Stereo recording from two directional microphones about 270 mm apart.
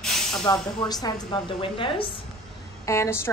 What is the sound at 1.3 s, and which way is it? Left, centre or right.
A woman's voice, centre.